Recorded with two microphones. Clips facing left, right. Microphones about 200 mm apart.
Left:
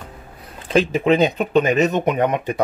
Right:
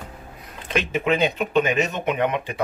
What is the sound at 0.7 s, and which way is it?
Speech, 35° left (ahead or behind).